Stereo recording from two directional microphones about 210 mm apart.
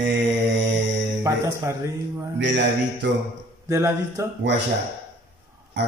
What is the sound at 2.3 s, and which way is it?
Speech, 55° right (ahead or behind).